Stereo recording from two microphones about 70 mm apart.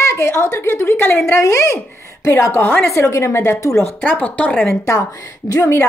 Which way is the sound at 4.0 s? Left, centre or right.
Left.